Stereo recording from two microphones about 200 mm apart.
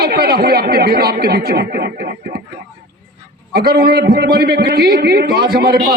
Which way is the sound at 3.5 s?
50° right (ahead or behind).